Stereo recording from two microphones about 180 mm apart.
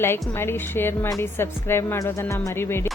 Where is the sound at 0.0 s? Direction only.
15° left (ahead or behind).